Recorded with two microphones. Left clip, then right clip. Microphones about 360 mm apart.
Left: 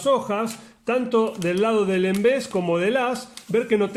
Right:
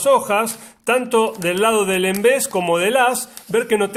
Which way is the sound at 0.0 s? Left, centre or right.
Right.